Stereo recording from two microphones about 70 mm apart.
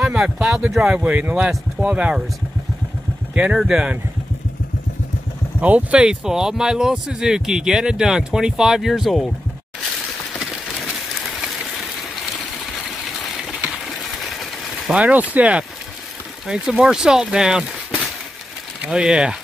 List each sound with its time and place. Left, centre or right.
0.0 s speech: centre
3.5 s speech: centre
5.6 s speech: right; by 9.3 s centre
10.8 s run: centre
14.2 s vehicle: centre
14.9 s speech: centre